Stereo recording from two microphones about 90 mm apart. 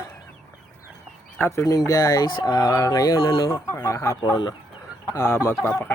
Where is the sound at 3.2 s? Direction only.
60° left (ahead or behind).